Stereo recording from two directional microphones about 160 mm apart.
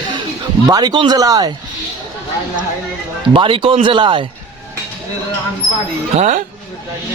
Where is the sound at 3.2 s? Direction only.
30° right (ahead or behind).